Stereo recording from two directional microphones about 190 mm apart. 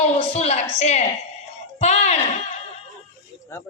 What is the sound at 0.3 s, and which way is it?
Speech, 35° left (ahead or behind).